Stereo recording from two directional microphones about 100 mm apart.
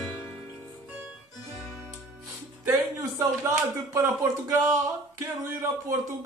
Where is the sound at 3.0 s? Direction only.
35° right (ahead or behind).